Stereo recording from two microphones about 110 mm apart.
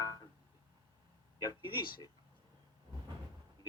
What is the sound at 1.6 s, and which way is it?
Speech, 45° left (ahead or behind).